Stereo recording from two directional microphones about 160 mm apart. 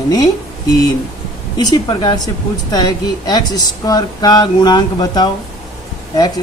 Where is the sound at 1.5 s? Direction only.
25° left (ahead or behind).